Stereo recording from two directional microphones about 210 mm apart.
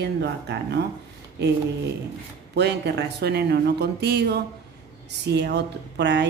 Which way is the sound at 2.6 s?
55° right (ahead or behind).